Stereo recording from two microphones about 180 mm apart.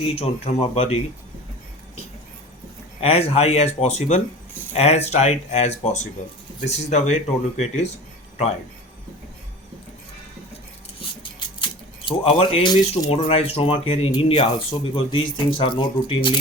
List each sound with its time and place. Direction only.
0.0 s speech: 35° left (ahead or behind)
3.0 s speech: 35° left (ahead or behind)
11.3 s a sound: 30° left (ahead or behind)
13.1 s speech: 35° left (ahead or behind)